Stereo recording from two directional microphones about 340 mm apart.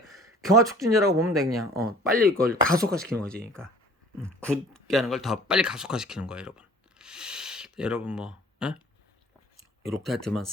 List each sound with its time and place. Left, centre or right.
0.1 s speech: centre
1.7 s speech: right
4.2 s speech: centre
9.8 s speech: centre